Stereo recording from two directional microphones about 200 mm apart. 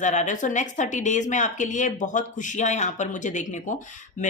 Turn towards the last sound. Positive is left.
turn(degrees=35)  # may be behind; listen again after turning